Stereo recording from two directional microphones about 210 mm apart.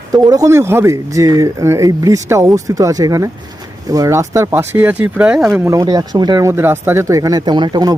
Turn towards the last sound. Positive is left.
turn(degrees=-20)  # may be behind; listen again after turning